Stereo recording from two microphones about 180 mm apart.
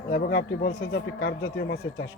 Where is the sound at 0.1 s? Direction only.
65° left (ahead or behind).